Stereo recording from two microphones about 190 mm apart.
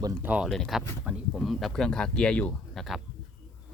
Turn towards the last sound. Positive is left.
turn(degrees=0)  # may be behind; listen again after turning